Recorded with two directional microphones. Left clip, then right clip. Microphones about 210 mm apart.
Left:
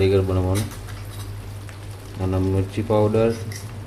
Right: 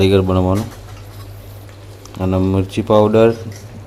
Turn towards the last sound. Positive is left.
turn(degrees=-35)  # may be behind; listen again after turning